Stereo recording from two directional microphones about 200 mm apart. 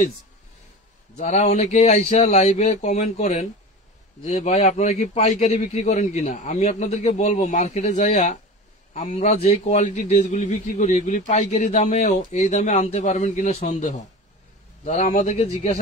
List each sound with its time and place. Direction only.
1.1 s a man's voice: 35° left (ahead or behind)